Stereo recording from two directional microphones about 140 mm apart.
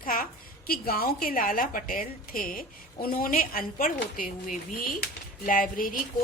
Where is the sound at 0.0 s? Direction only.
90° left.